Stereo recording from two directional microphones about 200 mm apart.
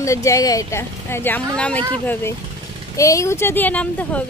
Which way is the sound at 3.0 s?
15° left (ahead or behind).